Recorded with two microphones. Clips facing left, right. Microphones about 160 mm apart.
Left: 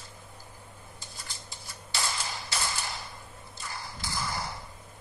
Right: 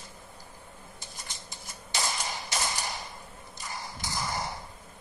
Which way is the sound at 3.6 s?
20° right (ahead or behind).